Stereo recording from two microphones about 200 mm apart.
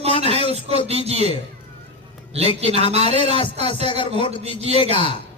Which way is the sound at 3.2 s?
25° left (ahead or behind).